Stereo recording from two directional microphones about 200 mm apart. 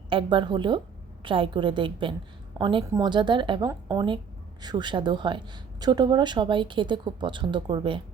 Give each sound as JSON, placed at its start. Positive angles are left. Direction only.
{"t": 0.1, "sound": "a woman's voice", "side_deg": -25}